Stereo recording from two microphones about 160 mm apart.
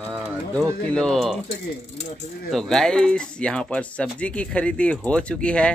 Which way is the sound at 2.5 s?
5° left (ahead or behind).